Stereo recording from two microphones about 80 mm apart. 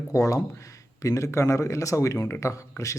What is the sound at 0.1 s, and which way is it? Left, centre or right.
Speech, left.